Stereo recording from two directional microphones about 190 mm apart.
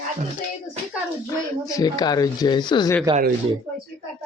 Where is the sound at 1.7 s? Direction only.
20° left (ahead or behind).